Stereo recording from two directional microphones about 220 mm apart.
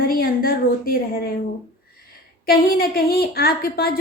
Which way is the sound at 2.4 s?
45° left (ahead or behind).